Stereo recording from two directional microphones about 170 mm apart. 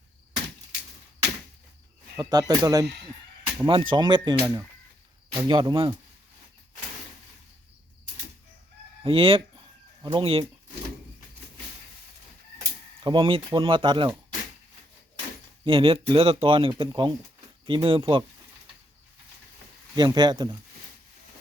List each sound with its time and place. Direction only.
2.1 s speech: 20° right (ahead or behind)
9.0 s speech: 30° right (ahead or behind)
13.1 s speech: 30° right (ahead or behind)
15.6 s speech: 30° right (ahead or behind)
20.0 s speech: 25° right (ahead or behind)